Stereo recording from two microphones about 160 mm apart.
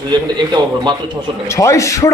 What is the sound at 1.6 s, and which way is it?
Speech, 20° left (ahead or behind).